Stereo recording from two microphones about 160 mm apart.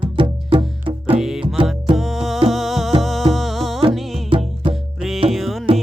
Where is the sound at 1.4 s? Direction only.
30° right (ahead or behind).